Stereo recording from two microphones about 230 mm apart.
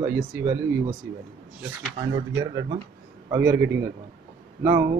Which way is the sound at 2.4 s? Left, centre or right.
Centre.